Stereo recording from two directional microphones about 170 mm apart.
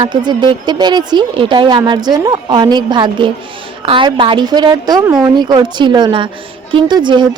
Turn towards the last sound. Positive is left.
turn(degrees=-25)  # may be behind; listen again after turning